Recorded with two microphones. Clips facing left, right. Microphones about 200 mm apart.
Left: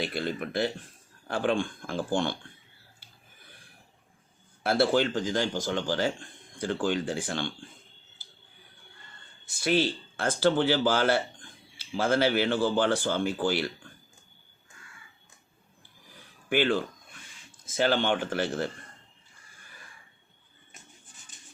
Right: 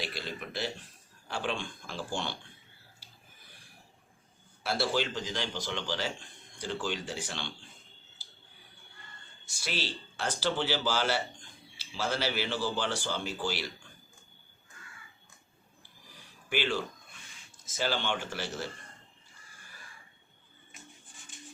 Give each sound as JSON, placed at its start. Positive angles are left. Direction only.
{"t": 0.1, "sound": "speech", "side_deg": 55}
{"t": 4.6, "sound": "speech", "side_deg": 55}
{"t": 9.5, "sound": "speech", "side_deg": 55}
{"t": 16.5, "sound": "speech", "side_deg": 55}